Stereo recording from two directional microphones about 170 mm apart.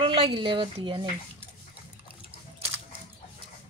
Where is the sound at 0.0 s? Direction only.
30° right (ahead or behind).